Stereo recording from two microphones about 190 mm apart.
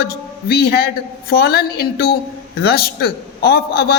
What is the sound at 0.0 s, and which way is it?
A man's voice, 55° left (ahead or behind).